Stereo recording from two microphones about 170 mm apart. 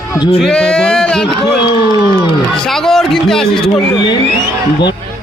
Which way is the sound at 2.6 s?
Centre (ahead or behind).